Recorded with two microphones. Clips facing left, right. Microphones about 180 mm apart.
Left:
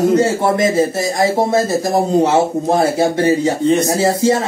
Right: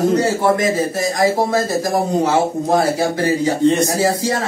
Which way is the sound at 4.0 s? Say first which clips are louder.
Left 4 dB; 25° left (ahead or behind).